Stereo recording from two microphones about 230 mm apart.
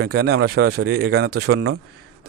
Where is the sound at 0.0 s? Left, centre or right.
Right.